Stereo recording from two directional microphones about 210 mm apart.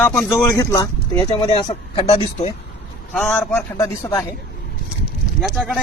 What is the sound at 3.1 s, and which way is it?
Speech, 10° left (ahead or behind).